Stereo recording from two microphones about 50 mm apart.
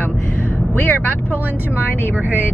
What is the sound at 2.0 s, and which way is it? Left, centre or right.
Speech, left.